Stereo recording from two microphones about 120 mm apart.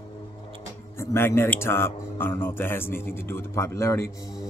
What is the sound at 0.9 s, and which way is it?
Speech, 20° left (ahead or behind).